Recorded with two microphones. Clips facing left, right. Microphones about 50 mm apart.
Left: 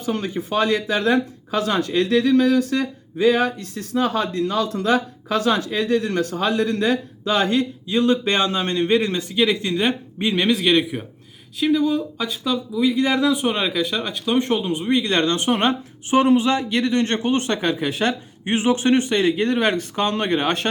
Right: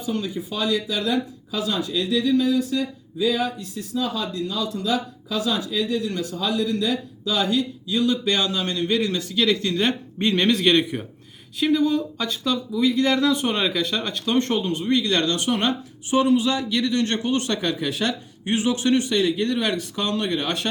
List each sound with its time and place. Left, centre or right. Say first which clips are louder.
0.0 s speech: left 2 dB; left